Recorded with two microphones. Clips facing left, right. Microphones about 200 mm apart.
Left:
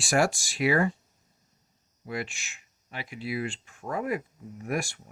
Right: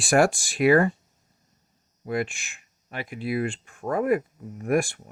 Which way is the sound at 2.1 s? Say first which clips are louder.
Right 7 dB; 55° right (ahead or behind).